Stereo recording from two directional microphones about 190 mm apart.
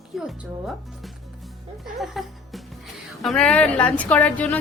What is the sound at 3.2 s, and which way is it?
Speech, 5° left (ahead or behind).